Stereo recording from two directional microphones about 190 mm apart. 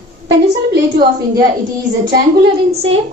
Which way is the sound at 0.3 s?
60° right (ahead or behind).